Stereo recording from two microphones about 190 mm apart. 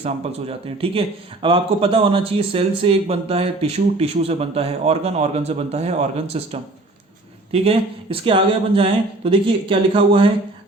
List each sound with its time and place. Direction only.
0.0 s speech: 30° right (ahead or behind)